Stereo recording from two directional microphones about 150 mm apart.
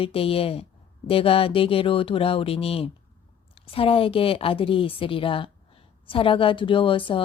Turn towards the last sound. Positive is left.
turn(degrees=35)  # may be behind; listen again after turning